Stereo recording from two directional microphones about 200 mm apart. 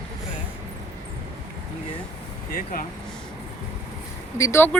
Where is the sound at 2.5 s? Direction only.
45° left (ahead or behind).